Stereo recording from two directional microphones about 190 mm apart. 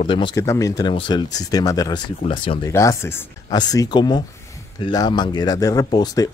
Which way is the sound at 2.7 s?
15° left (ahead or behind).